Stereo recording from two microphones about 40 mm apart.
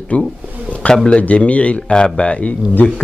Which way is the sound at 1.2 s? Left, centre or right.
Left.